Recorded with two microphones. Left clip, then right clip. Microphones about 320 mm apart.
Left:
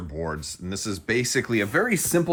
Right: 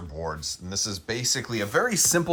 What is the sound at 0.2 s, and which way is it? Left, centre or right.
Speech, centre.